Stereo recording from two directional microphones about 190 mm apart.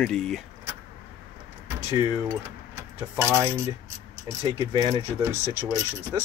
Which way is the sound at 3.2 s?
15° right (ahead or behind).